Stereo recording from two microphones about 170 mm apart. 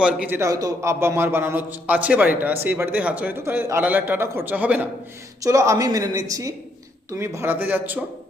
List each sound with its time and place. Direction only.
0.0 s a man's voice: 10° right (ahead or behind)